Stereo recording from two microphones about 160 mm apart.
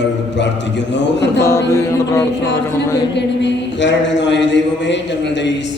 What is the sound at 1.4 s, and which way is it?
Music, 20° left (ahead or behind).